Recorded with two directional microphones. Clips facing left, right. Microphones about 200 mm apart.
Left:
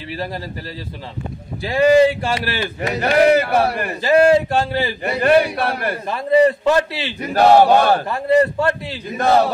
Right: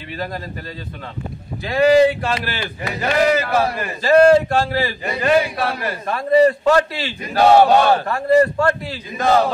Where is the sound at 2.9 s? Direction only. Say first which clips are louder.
Left 3 dB; 65° left (ahead or behind).